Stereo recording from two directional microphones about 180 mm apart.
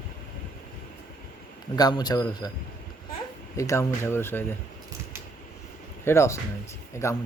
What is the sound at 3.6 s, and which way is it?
Speech, 15° left (ahead or behind).